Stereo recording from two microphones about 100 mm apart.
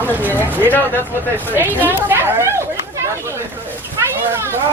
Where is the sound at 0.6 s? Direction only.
20° left (ahead or behind).